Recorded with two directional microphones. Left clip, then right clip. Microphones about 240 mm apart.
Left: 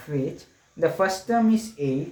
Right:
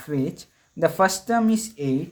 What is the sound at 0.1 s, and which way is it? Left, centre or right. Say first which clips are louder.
Speech: right 1 dB; right.